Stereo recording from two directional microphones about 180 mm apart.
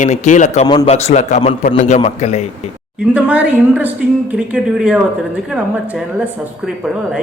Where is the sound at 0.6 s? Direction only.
30° left (ahead or behind).